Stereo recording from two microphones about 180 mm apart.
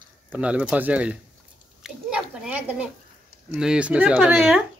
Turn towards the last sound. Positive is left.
turn(degrees=-5)  # may be behind; listen again after turning